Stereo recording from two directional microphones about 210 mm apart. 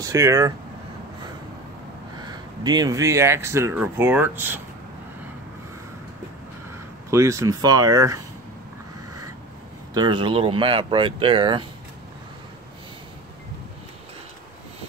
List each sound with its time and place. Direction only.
0.0 s speech: 15° right (ahead or behind)
2.2 s speech: 20° right (ahead or behind)
7.1 s speech: 15° right (ahead or behind)
9.9 s speech: 20° right (ahead or behind)